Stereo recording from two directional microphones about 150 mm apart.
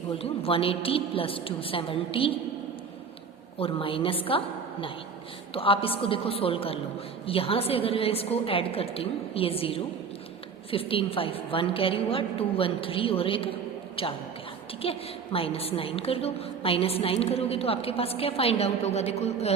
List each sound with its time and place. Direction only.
0.2 s a woman's voice: 40° left (ahead or behind)
3.6 s a woman's voice: 35° left (ahead or behind)